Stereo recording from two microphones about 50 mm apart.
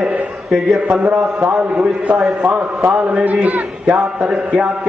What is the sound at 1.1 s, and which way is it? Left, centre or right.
A man's voice, right.